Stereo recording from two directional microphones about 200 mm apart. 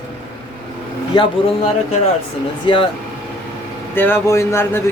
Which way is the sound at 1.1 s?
20° left (ahead or behind).